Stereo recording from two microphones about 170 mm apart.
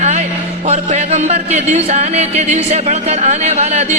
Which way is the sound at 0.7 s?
40° right (ahead or behind).